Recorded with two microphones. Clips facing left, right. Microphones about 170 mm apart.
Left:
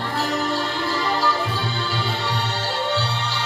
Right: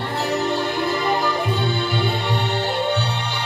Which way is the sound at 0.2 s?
20° right (ahead or behind).